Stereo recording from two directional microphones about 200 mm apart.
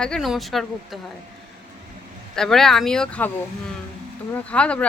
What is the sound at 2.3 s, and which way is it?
Speech, centre (ahead or behind).